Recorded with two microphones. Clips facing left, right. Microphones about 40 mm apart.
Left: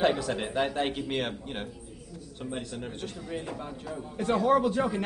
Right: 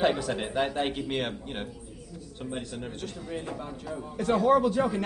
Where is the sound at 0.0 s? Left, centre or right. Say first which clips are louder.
Even; centre.